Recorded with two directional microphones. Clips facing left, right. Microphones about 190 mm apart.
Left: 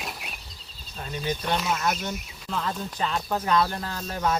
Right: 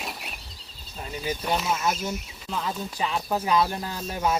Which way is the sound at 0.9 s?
10° right (ahead or behind).